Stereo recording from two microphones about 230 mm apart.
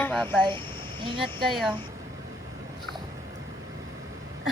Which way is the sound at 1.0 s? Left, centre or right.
Right.